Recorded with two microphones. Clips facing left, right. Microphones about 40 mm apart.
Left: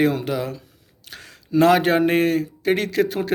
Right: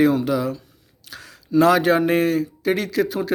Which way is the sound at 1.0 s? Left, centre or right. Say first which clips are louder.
Right 1 dB; left.